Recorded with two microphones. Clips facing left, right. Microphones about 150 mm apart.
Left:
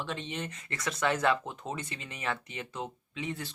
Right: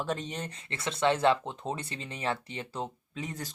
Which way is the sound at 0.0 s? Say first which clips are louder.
Right 3 dB; 40° right (ahead or behind).